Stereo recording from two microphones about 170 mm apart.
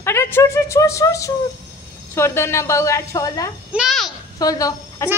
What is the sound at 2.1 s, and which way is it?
A woman's voice, 15° left (ahead or behind).